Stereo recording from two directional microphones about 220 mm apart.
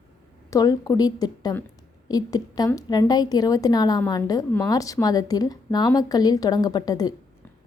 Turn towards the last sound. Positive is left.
turn(degrees=15)  # may be behind; listen again after turning